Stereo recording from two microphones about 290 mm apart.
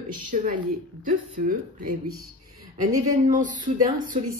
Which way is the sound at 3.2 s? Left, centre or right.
Right.